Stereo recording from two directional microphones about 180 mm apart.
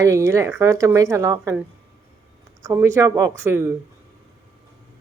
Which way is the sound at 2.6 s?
15° right (ahead or behind).